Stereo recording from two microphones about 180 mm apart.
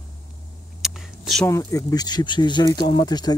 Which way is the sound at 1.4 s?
20° left (ahead or behind).